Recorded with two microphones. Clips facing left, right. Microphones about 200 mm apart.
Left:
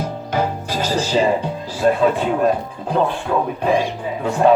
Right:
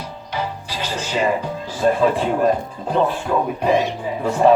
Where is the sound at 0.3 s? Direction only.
45° left (ahead or behind).